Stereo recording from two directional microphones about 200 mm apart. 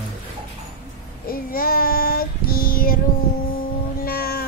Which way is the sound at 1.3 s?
45° left (ahead or behind).